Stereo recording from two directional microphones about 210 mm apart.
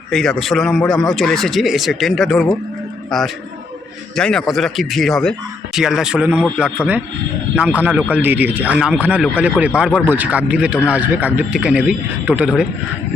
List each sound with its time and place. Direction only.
0.1 s speech: centre (ahead or behind)
7.5 s speech: 5° right (ahead or behind)